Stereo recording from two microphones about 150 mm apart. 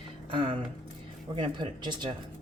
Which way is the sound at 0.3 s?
35° right (ahead or behind).